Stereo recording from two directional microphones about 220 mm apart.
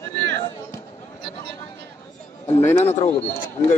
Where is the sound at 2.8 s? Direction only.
30° left (ahead or behind).